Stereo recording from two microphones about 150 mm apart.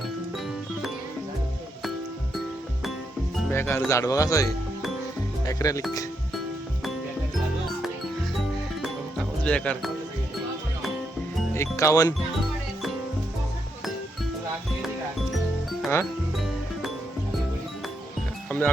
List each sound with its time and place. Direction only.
3.5 s speech: 15° left (ahead or behind)
8.8 s music: 5° left (ahead or behind)
11.5 s speech: 20° left (ahead or behind)
18.4 s music: 10° left (ahead or behind)